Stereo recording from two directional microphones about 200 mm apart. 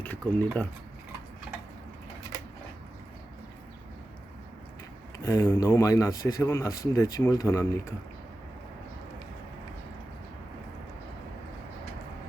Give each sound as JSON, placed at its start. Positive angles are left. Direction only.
{"t": 0.0, "sound": "speech", "side_deg": 10}
{"t": 5.2, "sound": "speech", "side_deg": 15}